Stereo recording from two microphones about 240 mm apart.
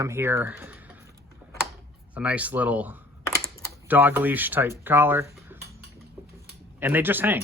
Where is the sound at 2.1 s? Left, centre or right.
Centre.